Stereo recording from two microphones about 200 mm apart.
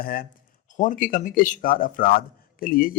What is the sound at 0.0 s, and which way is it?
Speech, 45° left (ahead or behind).